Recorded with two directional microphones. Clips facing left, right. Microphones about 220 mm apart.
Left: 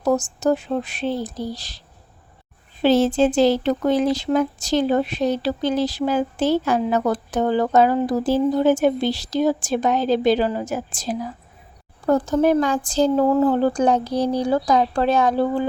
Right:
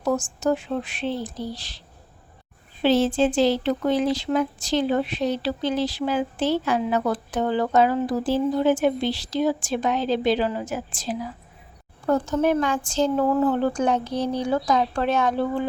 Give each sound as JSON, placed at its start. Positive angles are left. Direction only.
{"t": 0.0, "sound": "speech", "side_deg": 40}
{"t": 2.8, "sound": "speech", "side_deg": 45}